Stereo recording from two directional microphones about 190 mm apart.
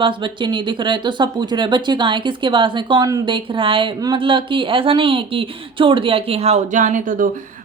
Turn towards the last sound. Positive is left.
turn(degrees=-45)  # may be behind; listen again after turning